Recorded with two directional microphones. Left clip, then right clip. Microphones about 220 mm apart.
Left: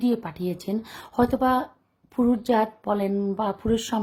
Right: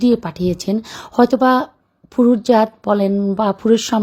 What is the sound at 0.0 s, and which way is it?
A woman's voice, 25° right (ahead or behind).